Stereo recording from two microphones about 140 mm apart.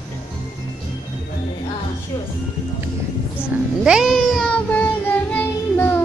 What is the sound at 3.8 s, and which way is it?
Cat, 5° right (ahead or behind).